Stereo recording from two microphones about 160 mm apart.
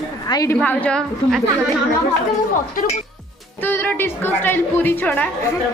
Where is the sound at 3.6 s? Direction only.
10° left (ahead or behind).